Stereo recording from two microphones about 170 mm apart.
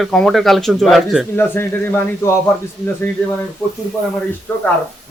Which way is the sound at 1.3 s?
15° left (ahead or behind).